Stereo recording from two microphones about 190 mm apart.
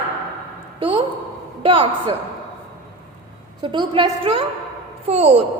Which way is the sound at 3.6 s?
25° right (ahead or behind).